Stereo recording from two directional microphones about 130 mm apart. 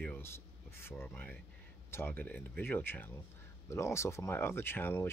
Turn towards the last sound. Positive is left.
turn(degrees=15)  # may be behind; listen again after turning